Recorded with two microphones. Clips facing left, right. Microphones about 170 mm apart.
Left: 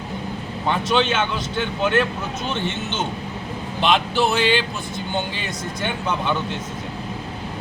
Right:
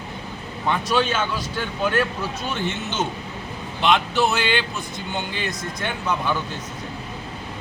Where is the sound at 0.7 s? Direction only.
25° left (ahead or behind).